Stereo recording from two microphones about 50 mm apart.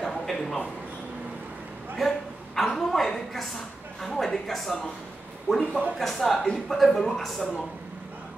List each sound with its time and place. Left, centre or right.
0.0 s a sound: centre
2.0 s a woman's voice: centre
5.5 s a man's voice: centre
5.9 s speech: centre